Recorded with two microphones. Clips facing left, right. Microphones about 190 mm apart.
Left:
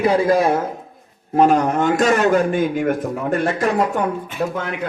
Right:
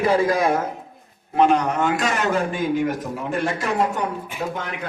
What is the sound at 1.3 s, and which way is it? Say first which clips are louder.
A man's voice: left 3 dB; 45° left (ahead or behind).